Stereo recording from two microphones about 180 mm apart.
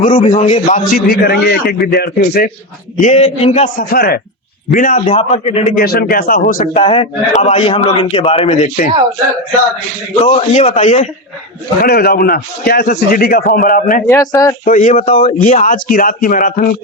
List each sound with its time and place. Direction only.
0.0 s a man's voice: 45° left (ahead or behind)
0.9 s a man's voice: 60° left (ahead or behind)
3.0 s a man's voice: 40° left (ahead or behind)
3.8 s a man's voice: 55° left (ahead or behind); by 5.7 s 35° left (ahead or behind)
5.7 s speech: 60° left (ahead or behind)
6.7 s a man's voice: 30° left (ahead or behind)
10.2 s a man's voice: 40° left (ahead or behind)
11.8 s a man's voice: 60° left (ahead or behind)
14.1 s speech: 20° left (ahead or behind)
14.6 s speech: 45° left (ahead or behind)